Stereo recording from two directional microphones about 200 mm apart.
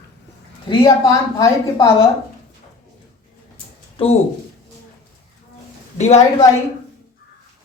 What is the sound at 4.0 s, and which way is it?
Speech, 25° left (ahead or behind).